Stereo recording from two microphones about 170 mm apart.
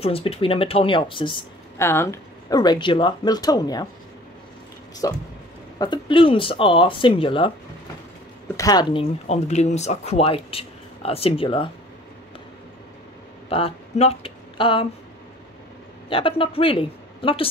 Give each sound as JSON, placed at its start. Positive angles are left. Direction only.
{"t": 0.0, "sound": "speech", "side_deg": 35}
{"t": 1.8, "sound": "speech", "side_deg": 15}
{"t": 5.0, "sound": "speech", "side_deg": 20}
{"t": 8.5, "sound": "speech", "side_deg": 25}
{"t": 9.3, "sound": "speech", "side_deg": 40}
{"t": 13.5, "sound": "speech", "side_deg": 35}
{"t": 16.1, "sound": "speech", "side_deg": 30}